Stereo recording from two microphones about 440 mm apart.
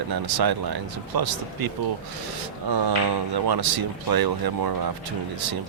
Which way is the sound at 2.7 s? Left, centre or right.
Right.